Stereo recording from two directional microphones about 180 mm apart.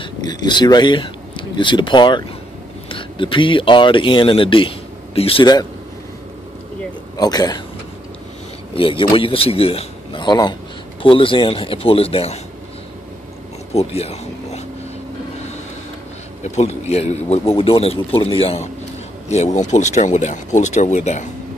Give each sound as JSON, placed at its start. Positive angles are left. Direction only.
{"t": 0.0, "sound": "speech", "side_deg": 25}
{"t": 7.2, "sound": "speech", "side_deg": 20}
{"t": 8.7, "sound": "a man's voice", "side_deg": 30}
{"t": 13.7, "sound": "a sound", "side_deg": 35}
{"t": 16.4, "sound": "a man's voice", "side_deg": 35}